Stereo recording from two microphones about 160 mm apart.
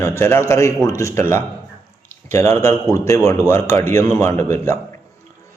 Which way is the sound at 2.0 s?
15° left (ahead or behind).